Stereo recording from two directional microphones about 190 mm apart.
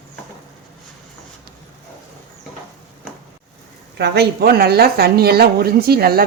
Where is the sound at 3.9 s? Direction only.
60° right (ahead or behind).